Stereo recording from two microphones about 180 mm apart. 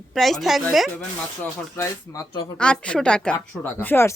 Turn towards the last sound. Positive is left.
turn(degrees=10)  # may be behind; listen again after turning